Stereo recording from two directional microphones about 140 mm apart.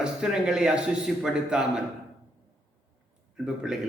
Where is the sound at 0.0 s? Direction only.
5° right (ahead or behind).